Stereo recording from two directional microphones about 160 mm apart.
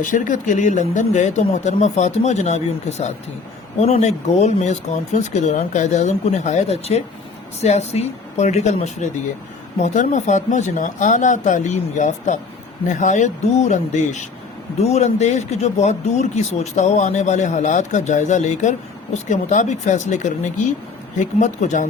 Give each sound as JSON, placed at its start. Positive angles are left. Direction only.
{"t": 0.0, "sound": "speech", "side_deg": 55}